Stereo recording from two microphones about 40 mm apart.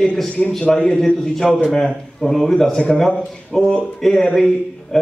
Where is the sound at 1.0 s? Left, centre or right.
Centre.